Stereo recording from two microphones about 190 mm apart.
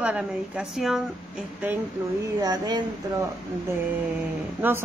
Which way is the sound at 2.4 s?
20° right (ahead or behind).